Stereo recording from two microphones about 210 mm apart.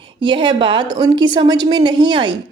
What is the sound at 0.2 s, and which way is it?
A woman's voice, 25° right (ahead or behind).